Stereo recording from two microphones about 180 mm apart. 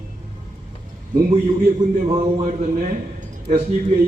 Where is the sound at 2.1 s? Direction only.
35° right (ahead or behind).